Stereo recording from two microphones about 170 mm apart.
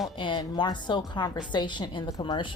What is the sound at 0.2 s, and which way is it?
A woman's voice, 30° left (ahead or behind).